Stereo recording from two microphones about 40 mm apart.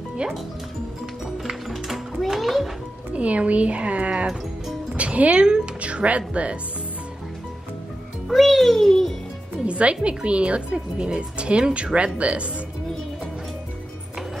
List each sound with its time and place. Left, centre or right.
0.2 s speech: right
1.7 s music: centre
3.1 s speech: right
8.3 s a child's voice: centre
9.7 s a woman's voice: right